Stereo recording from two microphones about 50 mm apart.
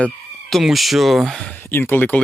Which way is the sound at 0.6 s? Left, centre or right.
Centre.